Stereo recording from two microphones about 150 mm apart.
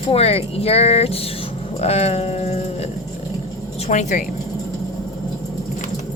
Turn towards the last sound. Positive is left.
turn(degrees=55)  # may be behind; listen again after turning